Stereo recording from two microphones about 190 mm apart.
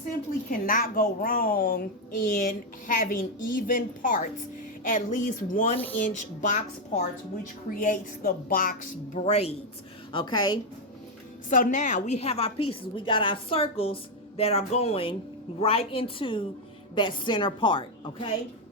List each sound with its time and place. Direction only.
0.6 s a woman's voice: 45° left (ahead or behind)
7.8 s a woman's voice: 45° left (ahead or behind); by 10.6 s 25° left (ahead or behind)
11.4 s a woman's voice: 45° left (ahead or behind); by 18.3 s 25° left (ahead or behind)